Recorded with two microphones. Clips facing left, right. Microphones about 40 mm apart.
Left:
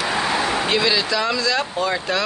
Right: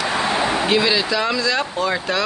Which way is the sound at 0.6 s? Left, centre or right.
Centre.